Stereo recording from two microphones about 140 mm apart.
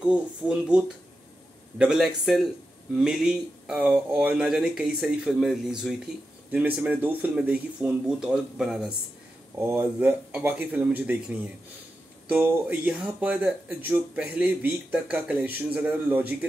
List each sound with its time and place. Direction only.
0.0 s speech: 5° right (ahead or behind)
9.6 s speech: 15° right (ahead or behind)